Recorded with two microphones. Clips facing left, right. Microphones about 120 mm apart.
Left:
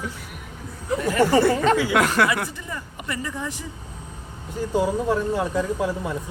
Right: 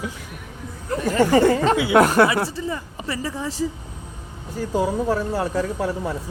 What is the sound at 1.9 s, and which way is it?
Speech, 35° right (ahead or behind).